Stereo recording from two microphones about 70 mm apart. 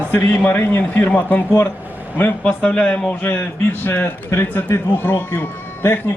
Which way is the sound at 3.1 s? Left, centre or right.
Left.